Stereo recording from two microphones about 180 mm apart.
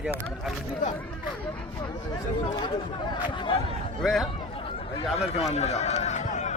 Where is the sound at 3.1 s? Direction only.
25° left (ahead or behind).